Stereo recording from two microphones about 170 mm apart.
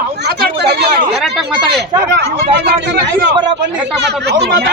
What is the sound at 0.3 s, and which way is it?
Chatter, 75° right (ahead or behind).